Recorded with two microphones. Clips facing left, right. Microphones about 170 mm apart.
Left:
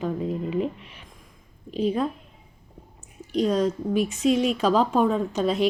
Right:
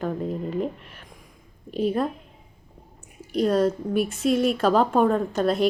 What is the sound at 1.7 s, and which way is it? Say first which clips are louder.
Speech: even; 5° right (ahead or behind).